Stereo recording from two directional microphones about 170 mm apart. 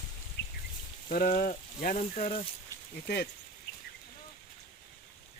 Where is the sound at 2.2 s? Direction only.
35° left (ahead or behind).